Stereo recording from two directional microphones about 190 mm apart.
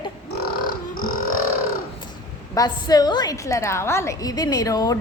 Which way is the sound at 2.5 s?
20° left (ahead or behind).